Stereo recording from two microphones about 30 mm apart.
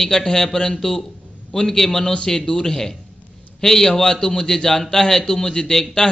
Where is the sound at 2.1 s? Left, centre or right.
Left.